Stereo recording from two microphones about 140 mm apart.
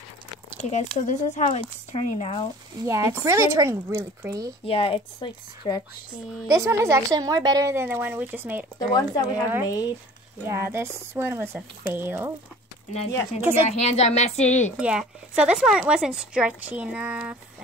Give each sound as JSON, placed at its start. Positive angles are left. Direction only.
{"t": 0.6, "sound": "a woman's voice", "side_deg": 55}
{"t": 2.9, "sound": "speech", "side_deg": -20}
{"t": 4.6, "sound": "speech", "side_deg": 40}
{"t": 6.4, "sound": "speech", "side_deg": -20}
{"t": 8.7, "sound": "speech", "side_deg": 30}
{"t": 10.4, "sound": "speech", "side_deg": -15}
{"t": 13.7, "sound": "a woman's voice", "side_deg": 50}
{"t": 14.8, "sound": "speech", "side_deg": -5}